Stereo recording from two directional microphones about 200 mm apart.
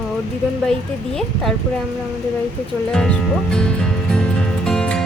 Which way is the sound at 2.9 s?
5° left (ahead or behind).